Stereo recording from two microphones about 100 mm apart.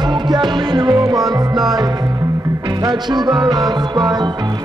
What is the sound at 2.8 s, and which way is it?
Music, 45° right (ahead or behind).